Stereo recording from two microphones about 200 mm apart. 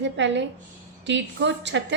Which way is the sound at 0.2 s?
65° right (ahead or behind).